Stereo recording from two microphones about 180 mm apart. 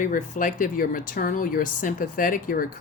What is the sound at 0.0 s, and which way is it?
Speech, 45° left (ahead or behind).